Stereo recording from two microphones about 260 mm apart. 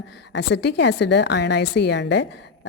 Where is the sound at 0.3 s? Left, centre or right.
Left.